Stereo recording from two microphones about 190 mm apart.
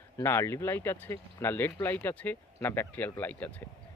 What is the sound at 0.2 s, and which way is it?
A man's voice, 15° left (ahead or behind).